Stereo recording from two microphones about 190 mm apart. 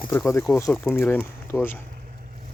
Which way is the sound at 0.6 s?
5° left (ahead or behind).